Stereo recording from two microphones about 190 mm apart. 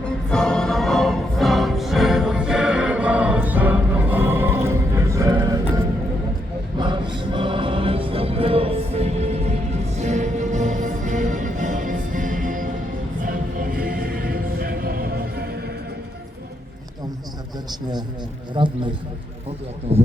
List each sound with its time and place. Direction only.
0.3 s music: 5° left (ahead or behind); by 15.7 s 55° right (ahead or behind)
18.6 s a man's voice: 30° right (ahead or behind)